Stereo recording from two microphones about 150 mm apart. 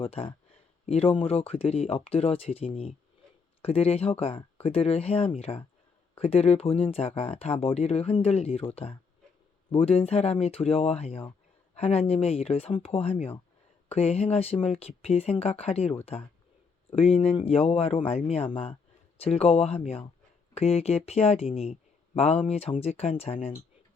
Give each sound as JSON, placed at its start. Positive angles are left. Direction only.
{"t": 0.0, "sound": "speech", "side_deg": 40}